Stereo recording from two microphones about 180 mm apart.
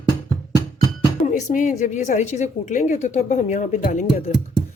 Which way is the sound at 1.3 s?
45° left (ahead or behind).